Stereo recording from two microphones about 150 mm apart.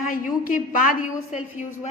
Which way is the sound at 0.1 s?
65° left (ahead or behind).